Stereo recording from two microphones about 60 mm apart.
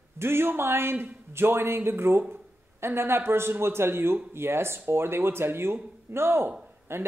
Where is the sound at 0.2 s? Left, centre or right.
Right.